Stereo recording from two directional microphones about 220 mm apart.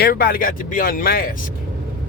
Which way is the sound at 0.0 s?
40° left (ahead or behind).